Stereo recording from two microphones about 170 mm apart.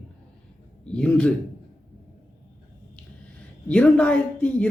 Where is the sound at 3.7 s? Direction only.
5° left (ahead or behind).